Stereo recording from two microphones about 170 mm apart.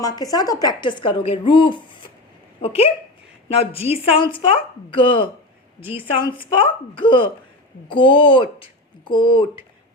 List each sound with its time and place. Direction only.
0.0 s a woman's voice: 20° left (ahead or behind)
5.8 s a woman's voice: 10° right (ahead or behind)
6.3 s a woman's voice: 30° left (ahead or behind)